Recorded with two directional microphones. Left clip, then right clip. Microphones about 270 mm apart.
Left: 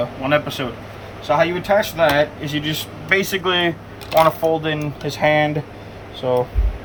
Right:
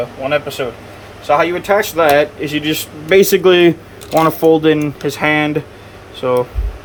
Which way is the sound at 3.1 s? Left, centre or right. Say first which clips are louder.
Right 9 dB; right.